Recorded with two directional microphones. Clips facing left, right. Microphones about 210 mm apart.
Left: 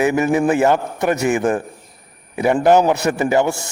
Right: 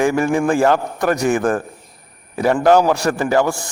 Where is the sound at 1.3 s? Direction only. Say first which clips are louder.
Even; 20° left (ahead or behind).